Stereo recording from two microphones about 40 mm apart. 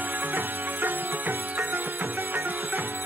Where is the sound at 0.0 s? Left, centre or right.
Right.